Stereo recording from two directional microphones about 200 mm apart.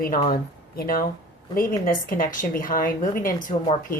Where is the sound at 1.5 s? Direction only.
45° left (ahead or behind).